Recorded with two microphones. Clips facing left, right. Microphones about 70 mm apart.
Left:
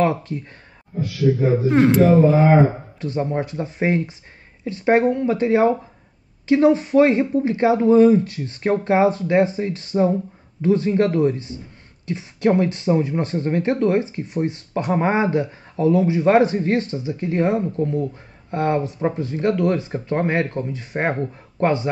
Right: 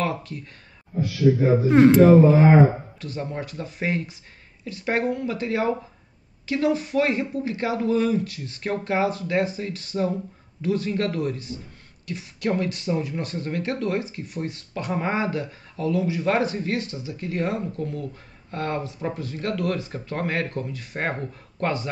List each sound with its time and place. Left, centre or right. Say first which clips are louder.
0.0 s speech: left 7 dB; left
1.7 s a man's voice: right 2 dB; centre
3.0 s speech: left 8 dB; left